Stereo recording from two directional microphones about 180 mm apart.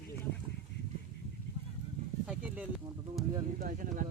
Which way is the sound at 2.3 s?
5° right (ahead or behind).